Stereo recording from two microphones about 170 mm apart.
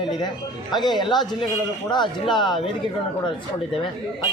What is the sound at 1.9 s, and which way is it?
Speech, 25° left (ahead or behind).